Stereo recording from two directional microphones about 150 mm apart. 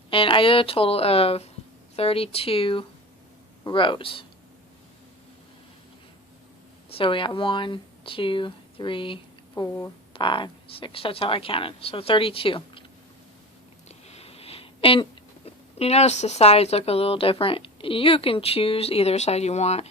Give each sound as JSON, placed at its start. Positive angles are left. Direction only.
{"t": 0.1, "sound": "speech", "side_deg": 35}
{"t": 6.9, "sound": "speech", "side_deg": 35}
{"t": 13.8, "sound": "a sound", "side_deg": 45}